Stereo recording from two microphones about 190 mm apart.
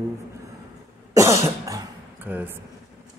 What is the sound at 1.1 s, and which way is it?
Cough, 15° right (ahead or behind).